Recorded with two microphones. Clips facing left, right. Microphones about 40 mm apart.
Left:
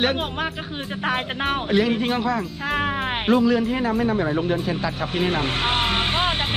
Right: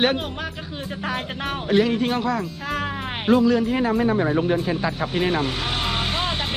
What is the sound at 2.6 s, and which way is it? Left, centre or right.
Speech, left.